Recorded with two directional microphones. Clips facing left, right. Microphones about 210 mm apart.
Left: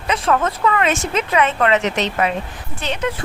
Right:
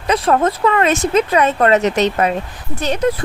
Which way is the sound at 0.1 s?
35° right (ahead or behind).